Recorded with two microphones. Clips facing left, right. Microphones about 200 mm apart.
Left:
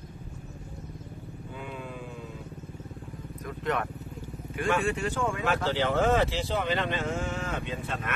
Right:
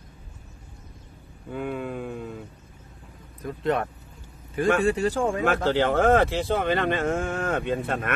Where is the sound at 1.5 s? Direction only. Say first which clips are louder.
Right 10 dB; 55° right (ahead or behind).